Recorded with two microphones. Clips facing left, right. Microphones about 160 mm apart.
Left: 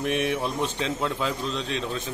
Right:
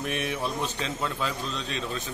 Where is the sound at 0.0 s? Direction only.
70° left (ahead or behind).